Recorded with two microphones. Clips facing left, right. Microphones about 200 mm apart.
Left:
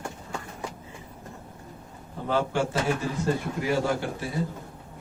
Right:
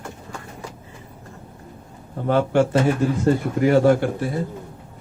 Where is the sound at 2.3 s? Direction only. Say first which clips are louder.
Right 8 dB; 60° right (ahead or behind).